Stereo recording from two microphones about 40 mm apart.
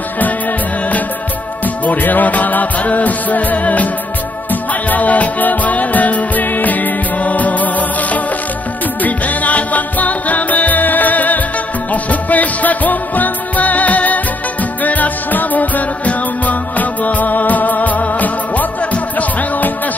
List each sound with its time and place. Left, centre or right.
1.9 s music: left